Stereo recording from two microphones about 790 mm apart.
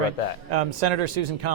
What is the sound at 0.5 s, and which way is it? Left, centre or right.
Speech, right.